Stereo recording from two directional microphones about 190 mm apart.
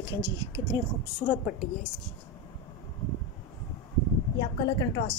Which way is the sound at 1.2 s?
5° left (ahead or behind).